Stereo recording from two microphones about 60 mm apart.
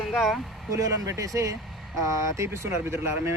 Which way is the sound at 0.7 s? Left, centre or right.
Right.